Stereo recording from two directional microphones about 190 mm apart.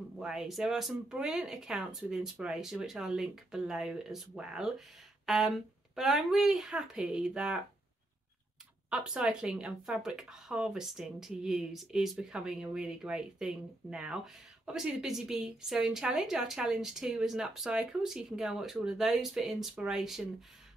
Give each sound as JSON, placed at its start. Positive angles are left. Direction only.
{"t": 0.2, "sound": "speech", "side_deg": -5}
{"t": 8.9, "sound": "speech", "side_deg": -5}